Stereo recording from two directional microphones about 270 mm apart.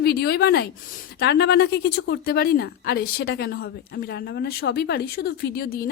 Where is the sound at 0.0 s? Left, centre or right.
Left.